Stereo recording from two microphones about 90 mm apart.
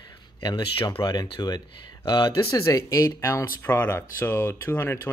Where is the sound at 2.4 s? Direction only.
35° left (ahead or behind).